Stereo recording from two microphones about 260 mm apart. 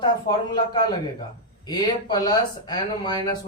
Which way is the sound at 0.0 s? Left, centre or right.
Centre.